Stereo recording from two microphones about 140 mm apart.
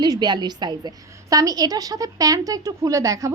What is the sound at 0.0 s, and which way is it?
A woman's voice, 30° right (ahead or behind).